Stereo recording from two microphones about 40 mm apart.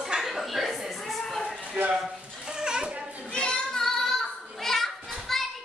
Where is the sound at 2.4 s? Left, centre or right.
Centre.